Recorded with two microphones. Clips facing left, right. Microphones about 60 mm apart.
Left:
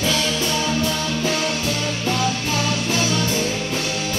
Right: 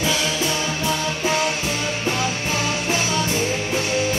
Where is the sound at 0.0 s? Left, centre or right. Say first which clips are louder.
Even; centre.